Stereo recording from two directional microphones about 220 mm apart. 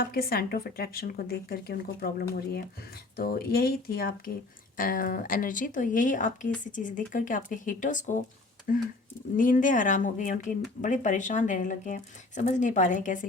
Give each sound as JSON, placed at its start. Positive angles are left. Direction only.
{"t": 0.0, "sound": "a woman's voice", "side_deg": 45}